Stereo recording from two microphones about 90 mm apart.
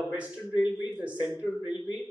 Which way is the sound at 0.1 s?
15° right (ahead or behind).